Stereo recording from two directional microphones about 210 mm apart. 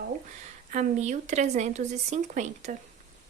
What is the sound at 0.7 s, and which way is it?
Speech, 35° right (ahead or behind).